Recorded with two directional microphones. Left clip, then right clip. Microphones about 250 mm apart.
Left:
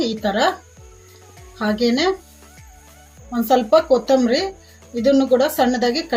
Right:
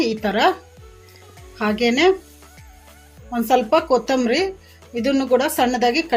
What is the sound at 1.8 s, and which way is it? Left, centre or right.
Speech, right.